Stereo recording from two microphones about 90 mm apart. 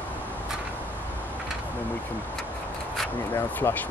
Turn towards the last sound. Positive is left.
turn(degrees=25)  # may be behind; listen again after turning